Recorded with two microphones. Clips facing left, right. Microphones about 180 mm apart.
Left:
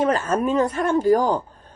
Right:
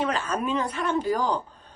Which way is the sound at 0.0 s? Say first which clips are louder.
Left 6 dB; 45° left (ahead or behind).